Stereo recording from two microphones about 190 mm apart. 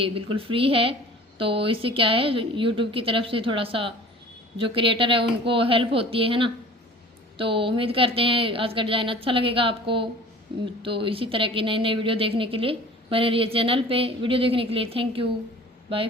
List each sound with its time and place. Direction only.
0.0 s a woman's voice: 30° right (ahead or behind)